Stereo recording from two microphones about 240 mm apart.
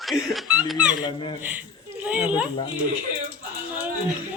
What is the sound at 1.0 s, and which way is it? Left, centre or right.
Speech, centre.